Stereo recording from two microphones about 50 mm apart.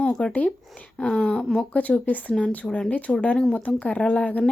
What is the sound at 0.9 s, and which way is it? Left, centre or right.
Speech, centre.